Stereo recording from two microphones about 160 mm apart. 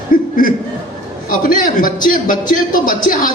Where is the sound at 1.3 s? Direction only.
60° left (ahead or behind).